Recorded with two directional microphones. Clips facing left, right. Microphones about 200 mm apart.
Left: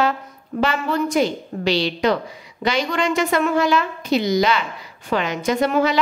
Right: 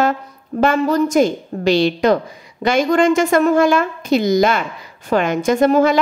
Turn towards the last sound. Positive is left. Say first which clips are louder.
# right 5 dB
turn(degrees=-45)  # may be behind; listen again after turning